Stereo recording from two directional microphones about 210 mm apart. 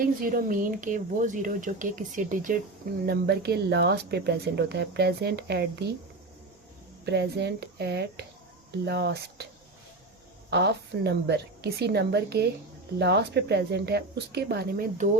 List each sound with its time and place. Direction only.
0.0 s speech: 45° right (ahead or behind)
7.0 s speech: 50° right (ahead or behind)
10.5 s speech: 50° right (ahead or behind)